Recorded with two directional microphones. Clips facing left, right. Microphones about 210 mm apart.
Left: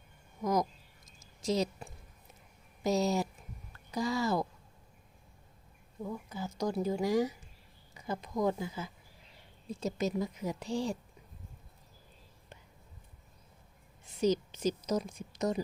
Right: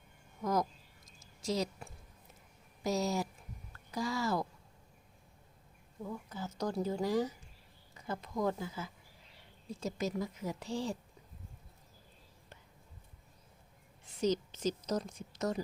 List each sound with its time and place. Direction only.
0.4 s a woman's voice: 15° left (ahead or behind)
1.4 s a sound: 20° left (ahead or behind)
2.8 s speech: 20° left (ahead or behind)
6.0 s a woman's voice: 10° left (ahead or behind)
14.2 s a woman's voice: 10° left (ahead or behind)